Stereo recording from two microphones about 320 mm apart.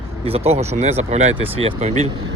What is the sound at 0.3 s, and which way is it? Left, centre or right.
Speech, centre.